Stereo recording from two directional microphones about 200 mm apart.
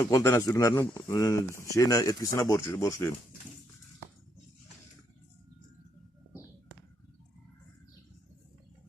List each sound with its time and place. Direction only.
0.0 s speech: 15° left (ahead or behind)